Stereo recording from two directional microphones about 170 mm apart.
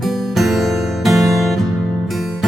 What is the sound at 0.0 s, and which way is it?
Music, centre (ahead or behind).